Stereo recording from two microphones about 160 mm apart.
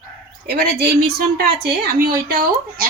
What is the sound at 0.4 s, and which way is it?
A woman's voice, 80° right.